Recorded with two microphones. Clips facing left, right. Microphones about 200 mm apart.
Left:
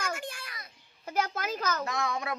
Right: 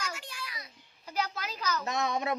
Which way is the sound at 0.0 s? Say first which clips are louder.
Left 4 dB; 50° left (ahead or behind).